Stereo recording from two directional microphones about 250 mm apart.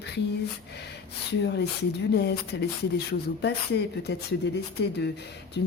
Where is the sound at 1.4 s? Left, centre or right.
Left.